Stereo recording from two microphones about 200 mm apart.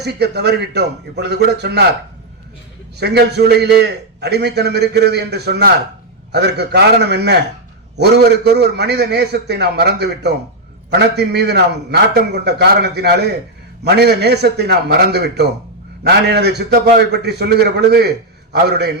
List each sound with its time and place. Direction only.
0.0 s a man's voice: 55° right (ahead or behind)
3.0 s a man's voice: 55° right (ahead or behind)